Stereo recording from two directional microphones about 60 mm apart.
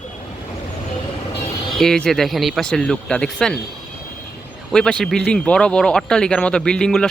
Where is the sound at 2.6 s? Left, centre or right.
Centre.